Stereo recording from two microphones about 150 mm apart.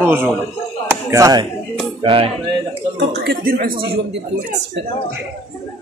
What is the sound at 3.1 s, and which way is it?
Speech, 85° right.